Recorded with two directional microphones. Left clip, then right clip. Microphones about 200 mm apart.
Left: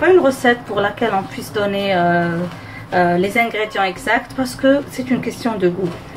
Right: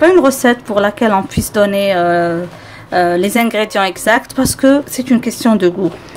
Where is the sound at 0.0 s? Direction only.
55° right (ahead or behind).